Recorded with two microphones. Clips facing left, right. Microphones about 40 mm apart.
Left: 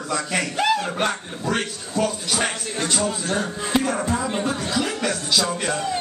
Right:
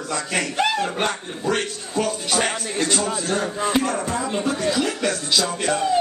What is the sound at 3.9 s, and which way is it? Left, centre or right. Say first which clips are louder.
Speech: left 1 dB; centre.